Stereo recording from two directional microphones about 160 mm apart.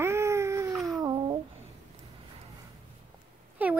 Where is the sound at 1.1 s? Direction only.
30° right (ahead or behind).